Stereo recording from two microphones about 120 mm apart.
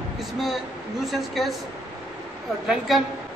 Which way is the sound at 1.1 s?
Centre (ahead or behind).